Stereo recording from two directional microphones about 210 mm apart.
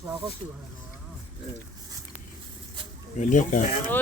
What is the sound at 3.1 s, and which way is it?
Speech, 35° left (ahead or behind).